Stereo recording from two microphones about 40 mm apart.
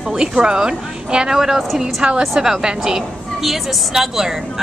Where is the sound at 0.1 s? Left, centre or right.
Right.